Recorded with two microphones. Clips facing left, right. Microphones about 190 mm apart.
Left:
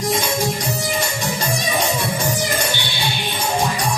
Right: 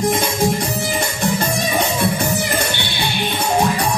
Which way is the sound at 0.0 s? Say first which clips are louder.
Right 3 dB; 55° right (ahead or behind).